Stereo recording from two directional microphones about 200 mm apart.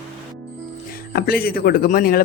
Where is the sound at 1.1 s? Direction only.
50° left (ahead or behind).